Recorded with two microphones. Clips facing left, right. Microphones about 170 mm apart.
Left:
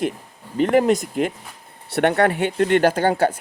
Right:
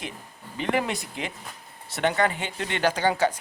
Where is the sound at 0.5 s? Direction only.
45° left (ahead or behind).